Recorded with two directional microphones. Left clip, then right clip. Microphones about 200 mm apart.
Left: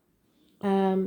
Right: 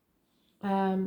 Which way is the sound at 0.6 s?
40° left (ahead or behind).